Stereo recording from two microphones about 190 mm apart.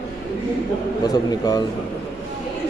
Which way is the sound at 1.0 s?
20° left (ahead or behind).